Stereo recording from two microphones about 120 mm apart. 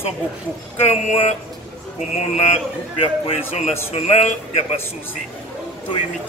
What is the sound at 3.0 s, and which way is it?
Speech, 55° left (ahead or behind).